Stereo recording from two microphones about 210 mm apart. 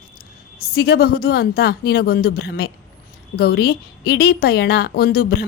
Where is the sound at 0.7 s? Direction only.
50° left (ahead or behind).